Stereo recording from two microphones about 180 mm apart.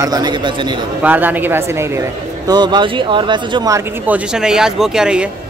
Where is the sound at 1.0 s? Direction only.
10° right (ahead or behind).